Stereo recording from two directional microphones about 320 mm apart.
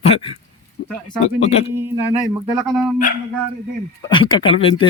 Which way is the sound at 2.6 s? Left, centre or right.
Centre.